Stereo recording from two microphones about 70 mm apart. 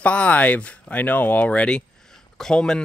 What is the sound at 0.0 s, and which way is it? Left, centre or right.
Speech, centre.